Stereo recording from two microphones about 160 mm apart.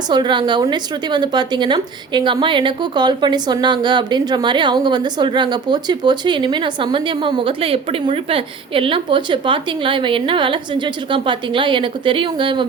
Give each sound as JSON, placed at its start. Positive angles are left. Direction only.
{"t": 0.1, "sound": "speech", "side_deg": -30}